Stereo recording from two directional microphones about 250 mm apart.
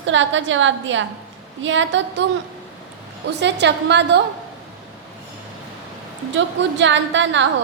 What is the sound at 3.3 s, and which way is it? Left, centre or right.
Speech, right.